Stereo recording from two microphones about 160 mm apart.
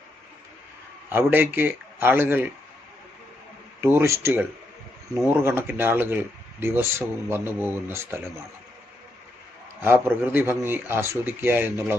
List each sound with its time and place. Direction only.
1.1 s speech: 15° right (ahead or behind)
3.9 s speech: 15° right (ahead or behind)
9.8 s speech: 15° right (ahead or behind)